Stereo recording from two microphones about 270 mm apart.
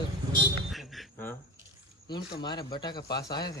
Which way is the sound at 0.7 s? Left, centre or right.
Centre.